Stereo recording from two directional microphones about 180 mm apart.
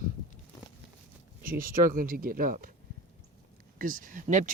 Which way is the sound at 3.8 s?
50° right (ahead or behind).